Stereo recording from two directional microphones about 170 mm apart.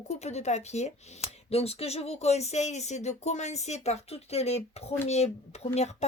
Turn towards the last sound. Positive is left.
turn(degrees=40)  # may be behind; listen again after turning